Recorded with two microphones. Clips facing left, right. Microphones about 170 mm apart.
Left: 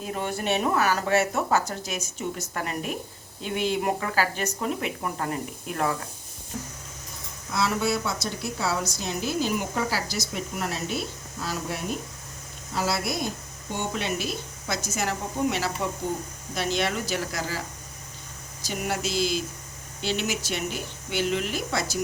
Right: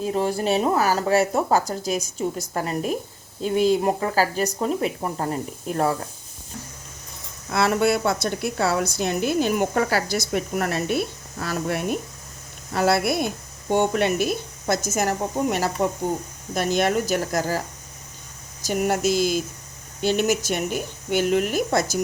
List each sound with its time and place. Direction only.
0.0 s speech: 35° right (ahead or behind)
7.5 s a woman's voice: 60° right (ahead or behind)
18.6 s speech: 45° right (ahead or behind)